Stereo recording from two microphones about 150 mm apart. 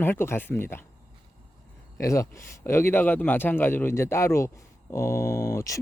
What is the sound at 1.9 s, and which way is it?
Speech, 20° left (ahead or behind).